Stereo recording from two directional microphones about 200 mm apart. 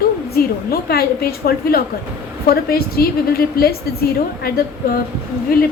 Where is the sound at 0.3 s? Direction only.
50° left (ahead or behind).